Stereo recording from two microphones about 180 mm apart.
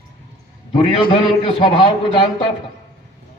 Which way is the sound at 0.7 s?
30° left (ahead or behind).